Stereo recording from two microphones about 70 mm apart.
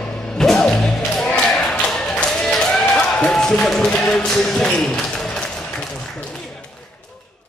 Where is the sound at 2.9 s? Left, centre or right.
Centre.